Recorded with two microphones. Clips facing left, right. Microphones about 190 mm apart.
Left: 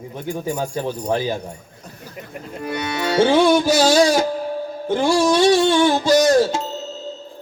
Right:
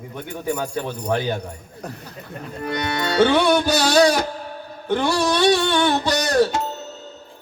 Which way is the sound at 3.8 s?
25° left (ahead or behind).